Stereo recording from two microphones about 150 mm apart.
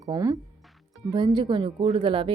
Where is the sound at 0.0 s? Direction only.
25° right (ahead or behind).